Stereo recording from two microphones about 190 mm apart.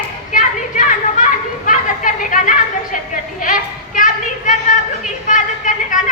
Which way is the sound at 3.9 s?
45° left (ahead or behind).